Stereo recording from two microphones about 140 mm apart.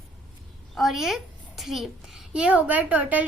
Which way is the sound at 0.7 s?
Centre (ahead or behind).